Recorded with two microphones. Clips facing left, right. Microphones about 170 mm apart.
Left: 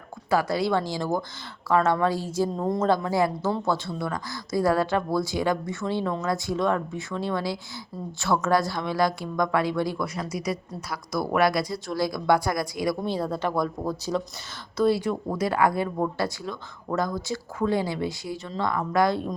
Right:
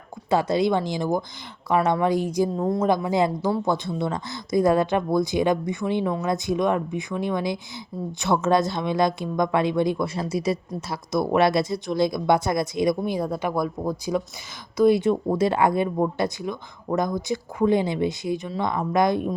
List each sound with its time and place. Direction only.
0.3 s a woman's voice: 20° right (ahead or behind)
2.6 s speech: centre (ahead or behind)
2.8 s a woman's voice: 15° right (ahead or behind)